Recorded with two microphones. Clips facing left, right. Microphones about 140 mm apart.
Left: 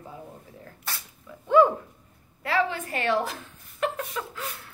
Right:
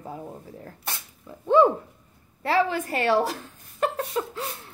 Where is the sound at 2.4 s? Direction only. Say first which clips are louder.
Right 3 dB; 35° right (ahead or behind).